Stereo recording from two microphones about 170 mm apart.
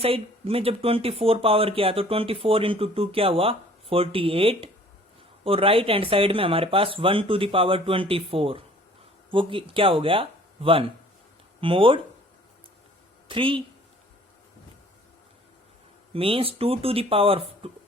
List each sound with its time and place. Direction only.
0.0 s speech: 35° right (ahead or behind)
13.2 s speech: 30° right (ahead or behind)
16.1 s speech: 30° right (ahead or behind)